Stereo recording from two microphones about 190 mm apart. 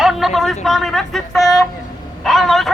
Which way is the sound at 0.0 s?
Centre (ahead or behind).